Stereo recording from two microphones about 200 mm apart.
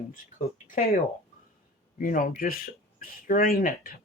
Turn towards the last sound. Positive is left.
turn(degrees=45)  # may be behind; listen again after turning